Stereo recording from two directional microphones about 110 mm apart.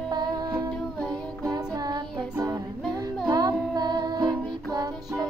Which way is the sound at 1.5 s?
35° right (ahead or behind).